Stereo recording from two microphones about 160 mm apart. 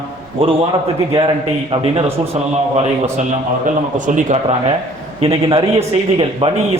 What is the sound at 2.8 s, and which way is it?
A man's voice, 45° right (ahead or behind).